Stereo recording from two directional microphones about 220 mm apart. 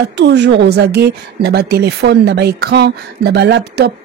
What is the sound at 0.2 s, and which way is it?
A woman's voice, 50° right (ahead or behind).